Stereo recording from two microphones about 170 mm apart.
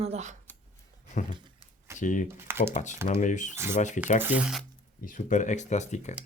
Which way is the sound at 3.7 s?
45° left (ahead or behind).